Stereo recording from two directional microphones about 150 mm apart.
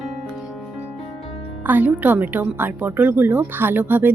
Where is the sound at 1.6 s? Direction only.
10° right (ahead or behind).